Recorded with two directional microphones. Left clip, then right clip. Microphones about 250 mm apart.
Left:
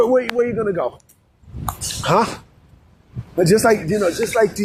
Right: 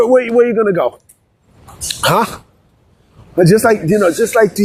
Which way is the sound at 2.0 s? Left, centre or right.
Right.